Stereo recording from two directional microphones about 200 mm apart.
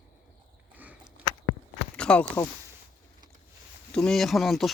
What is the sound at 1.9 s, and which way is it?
Speech, 5° left (ahead or behind).